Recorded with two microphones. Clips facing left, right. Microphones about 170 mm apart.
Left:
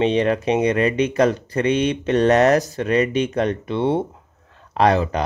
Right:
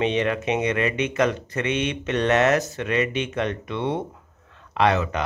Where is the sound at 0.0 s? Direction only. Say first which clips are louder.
Left 4 dB; 35° left (ahead or behind).